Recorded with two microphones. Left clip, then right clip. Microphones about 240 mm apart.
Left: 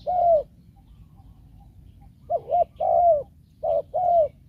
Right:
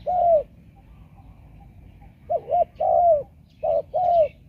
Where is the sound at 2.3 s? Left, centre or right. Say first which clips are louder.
Right 1 dB; centre.